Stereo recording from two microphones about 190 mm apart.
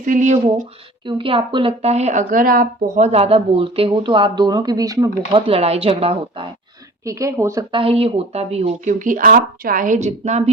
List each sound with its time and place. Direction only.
0.0 s speech: 40° right (ahead or behind)
1.0 s speech: 25° right (ahead or behind)
5.5 s speech: 35° right (ahead or behind)
7.0 s a woman's voice: 15° right (ahead or behind)
7.7 s speech: 30° right (ahead or behind)